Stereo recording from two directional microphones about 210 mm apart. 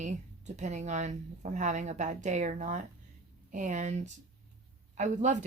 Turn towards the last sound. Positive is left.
turn(degrees=-35)  # may be behind; listen again after turning